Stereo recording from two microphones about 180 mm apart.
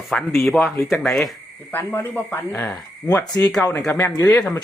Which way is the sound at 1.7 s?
15° left (ahead or behind).